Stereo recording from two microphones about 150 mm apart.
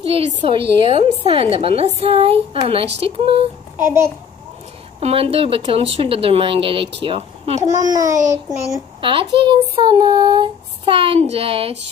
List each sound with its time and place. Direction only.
0.0 s child singing: 40° right (ahead or behind)
3.7 s a child's voice: 15° right (ahead or behind)
5.0 s child singing: 40° right (ahead or behind)
7.6 s a child's voice: 25° right (ahead or behind)
9.0 s child singing: 35° right (ahead or behind)